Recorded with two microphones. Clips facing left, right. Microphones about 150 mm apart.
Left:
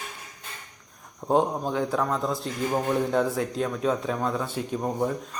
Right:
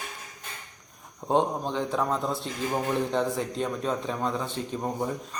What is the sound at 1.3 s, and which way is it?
A man's voice, 5° left (ahead or behind).